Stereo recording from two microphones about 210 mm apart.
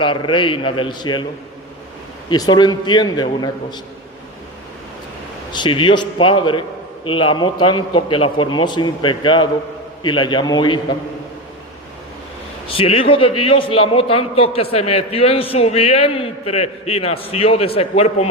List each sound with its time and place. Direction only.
0.0 s a man's voice: 20° left (ahead or behind)
2.3 s a man's voice: 20° left (ahead or behind)
5.5 s a man's voice: 20° left (ahead or behind)
12.6 s a man's voice: 25° left (ahead or behind)